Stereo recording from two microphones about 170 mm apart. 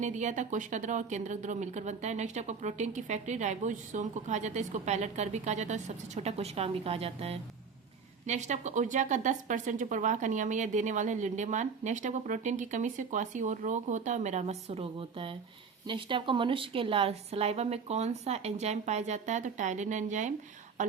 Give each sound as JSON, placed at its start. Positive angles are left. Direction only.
{"t": 0.0, "sound": "a woman's voice", "side_deg": -45}